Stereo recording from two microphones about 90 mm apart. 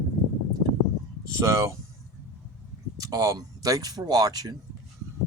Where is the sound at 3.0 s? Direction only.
40° right (ahead or behind).